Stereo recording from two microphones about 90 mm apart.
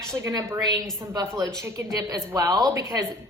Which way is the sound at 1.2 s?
35° right (ahead or behind).